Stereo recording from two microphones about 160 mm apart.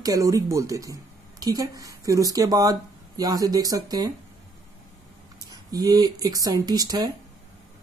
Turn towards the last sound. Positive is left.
turn(degrees=-25)  # may be behind; listen again after turning